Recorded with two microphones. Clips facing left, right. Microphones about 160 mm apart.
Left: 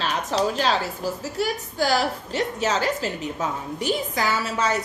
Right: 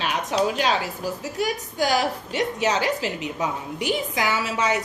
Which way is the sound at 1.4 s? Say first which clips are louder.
Even; 15° right (ahead or behind).